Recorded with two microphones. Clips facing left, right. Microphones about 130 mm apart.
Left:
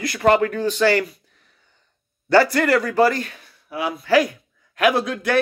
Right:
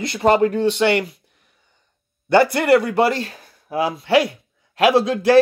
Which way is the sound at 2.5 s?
25° right (ahead or behind).